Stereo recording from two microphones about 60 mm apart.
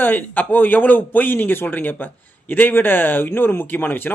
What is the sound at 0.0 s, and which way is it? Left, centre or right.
Speech, left.